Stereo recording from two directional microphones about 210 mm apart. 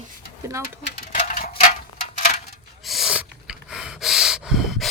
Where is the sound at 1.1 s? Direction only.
35° left (ahead or behind).